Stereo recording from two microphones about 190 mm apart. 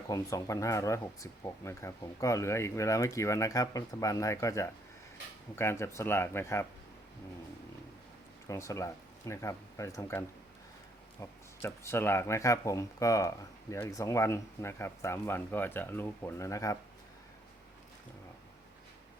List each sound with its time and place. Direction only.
0.1 s speech: 15° left (ahead or behind)
8.4 s speech: 15° left (ahead or behind)